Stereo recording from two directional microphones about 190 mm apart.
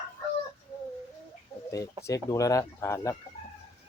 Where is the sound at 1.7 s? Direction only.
15° left (ahead or behind).